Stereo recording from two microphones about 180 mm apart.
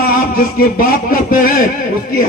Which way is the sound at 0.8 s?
50° left (ahead or behind).